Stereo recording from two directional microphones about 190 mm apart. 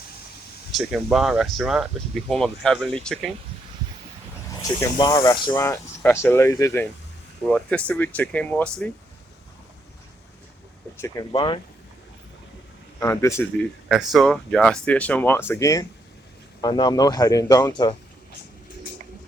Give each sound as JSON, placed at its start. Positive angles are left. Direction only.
{"t": 0.7, "sound": "speech", "side_deg": 0}
{"t": 4.8, "sound": "speech", "side_deg": 20}
{"t": 11.0, "sound": "a man's voice", "side_deg": 20}
{"t": 13.0, "sound": "speech", "side_deg": 15}
{"t": 13.8, "sound": "a man's voice", "side_deg": 0}